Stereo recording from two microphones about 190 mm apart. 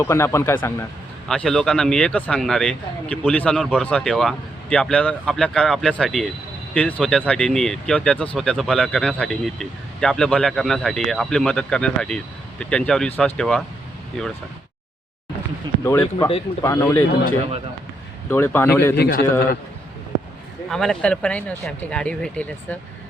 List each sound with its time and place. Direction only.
0.0 s speech: 15° left (ahead or behind)
15.8 s speech: 15° left (ahead or behind)
18.3 s speech: 10° left (ahead or behind)
18.9 s a man's voice: 60° left (ahead or behind)
20.7 s speech: centre (ahead or behind)